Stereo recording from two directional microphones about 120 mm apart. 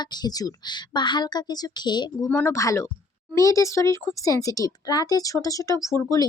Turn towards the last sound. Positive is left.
turn(degrees=25)  # may be behind; listen again after turning